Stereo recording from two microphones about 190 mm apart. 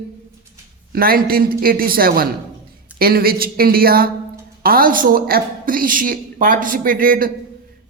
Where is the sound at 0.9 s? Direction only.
50° right (ahead or behind).